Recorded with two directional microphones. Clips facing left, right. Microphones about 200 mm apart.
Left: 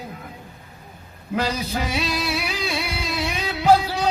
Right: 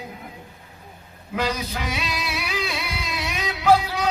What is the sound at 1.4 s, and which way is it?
Music, 30° left (ahead or behind).